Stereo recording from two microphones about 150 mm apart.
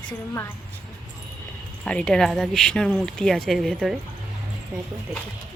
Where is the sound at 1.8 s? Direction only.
10° left (ahead or behind).